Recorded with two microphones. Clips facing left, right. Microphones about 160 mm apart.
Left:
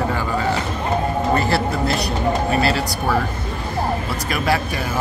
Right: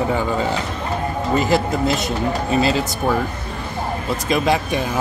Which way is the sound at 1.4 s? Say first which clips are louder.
Right 2 dB; 15° right (ahead or behind).